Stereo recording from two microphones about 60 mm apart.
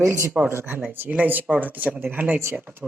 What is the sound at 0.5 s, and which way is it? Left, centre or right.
Speech, right.